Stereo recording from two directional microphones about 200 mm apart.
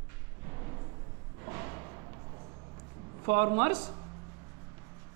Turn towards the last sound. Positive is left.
turn(degrees=-30)  # may be behind; listen again after turning